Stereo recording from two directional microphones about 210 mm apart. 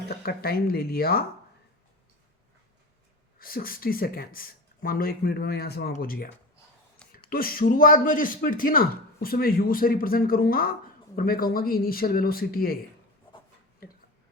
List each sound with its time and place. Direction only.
0.1 s a man's voice: 45° left (ahead or behind)
3.3 s a man's voice: 45° left (ahead or behind)
7.3 s a man's voice: 45° left (ahead or behind)